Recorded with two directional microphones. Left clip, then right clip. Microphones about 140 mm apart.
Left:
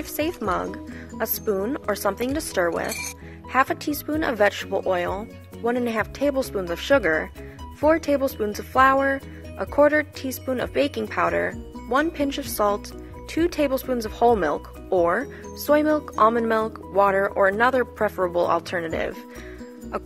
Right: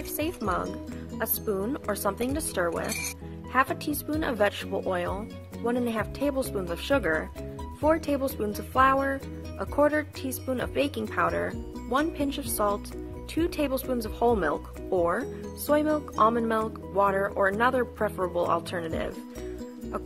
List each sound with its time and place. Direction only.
0.2 s speech: 40° left (ahead or behind)